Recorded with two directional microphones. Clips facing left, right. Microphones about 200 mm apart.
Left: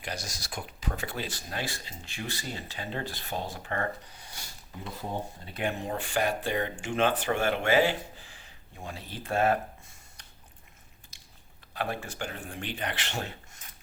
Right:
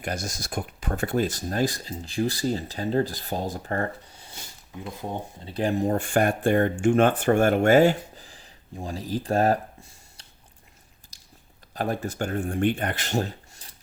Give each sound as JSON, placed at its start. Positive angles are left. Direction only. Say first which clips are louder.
{"t": 0.0, "sound": "speech", "louder": "right 7 dB", "side_deg": -50}
{"t": 5.5, "sound": "speech", "louder": "right 9 dB", "side_deg": -35}
{"t": 11.1, "sound": "biting", "louder": "even", "side_deg": -35}
{"t": 11.7, "sound": "speech", "louder": "right 6 dB", "side_deg": -40}